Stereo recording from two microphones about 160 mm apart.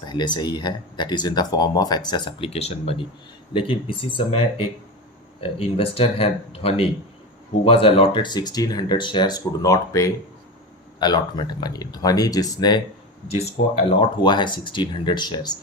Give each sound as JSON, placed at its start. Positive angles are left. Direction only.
{"t": 0.0, "sound": "speech", "side_deg": 30}
{"t": 13.4, "sound": "speech", "side_deg": 35}